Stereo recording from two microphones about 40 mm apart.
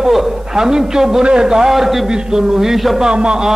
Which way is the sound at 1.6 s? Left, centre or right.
Centre.